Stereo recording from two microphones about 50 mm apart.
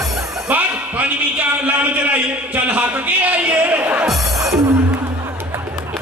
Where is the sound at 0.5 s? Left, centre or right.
Right.